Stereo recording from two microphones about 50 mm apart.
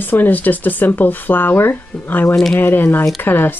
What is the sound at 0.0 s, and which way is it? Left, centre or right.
Speech, left.